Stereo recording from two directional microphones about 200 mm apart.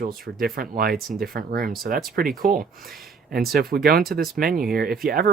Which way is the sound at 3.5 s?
50° right (ahead or behind).